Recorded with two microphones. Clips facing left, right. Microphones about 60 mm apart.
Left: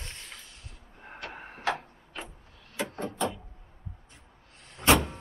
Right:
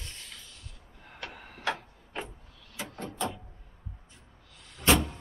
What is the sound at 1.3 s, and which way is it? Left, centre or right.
Tick-tock, left.